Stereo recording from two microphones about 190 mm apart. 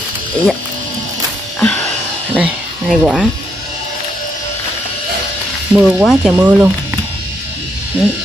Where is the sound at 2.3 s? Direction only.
5° right (ahead or behind).